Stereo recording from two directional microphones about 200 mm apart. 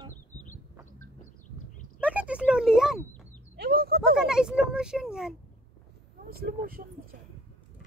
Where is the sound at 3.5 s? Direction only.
50° right (ahead or behind).